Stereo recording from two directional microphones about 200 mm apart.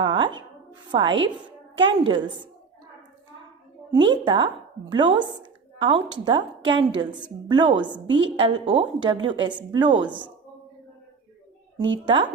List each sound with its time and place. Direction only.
0.0 s a sound: 25° right (ahead or behind)
0.9 s a woman's voice: 25° right (ahead or behind)
3.9 s a woman's voice: 25° right (ahead or behind)
11.8 s a woman's voice: 25° right (ahead or behind)